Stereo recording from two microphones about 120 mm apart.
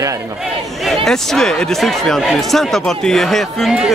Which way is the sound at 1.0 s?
5° left (ahead or behind).